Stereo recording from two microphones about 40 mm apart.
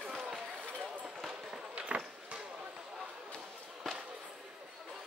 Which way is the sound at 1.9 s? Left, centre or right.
Right.